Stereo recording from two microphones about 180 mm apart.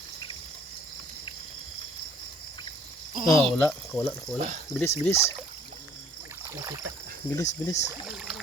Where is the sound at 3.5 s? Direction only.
5° left (ahead or behind).